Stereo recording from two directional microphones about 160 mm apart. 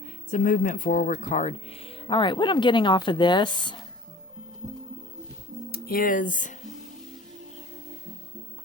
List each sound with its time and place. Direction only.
0.3 s speech: 55° left (ahead or behind); by 3.8 s 30° left (ahead or behind)
5.7 s speech: 65° left (ahead or behind)